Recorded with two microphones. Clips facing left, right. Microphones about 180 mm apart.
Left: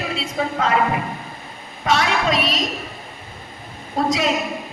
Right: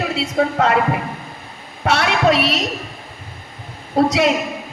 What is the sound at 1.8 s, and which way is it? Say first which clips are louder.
Speech: right 3 dB; 65° right (ahead or behind).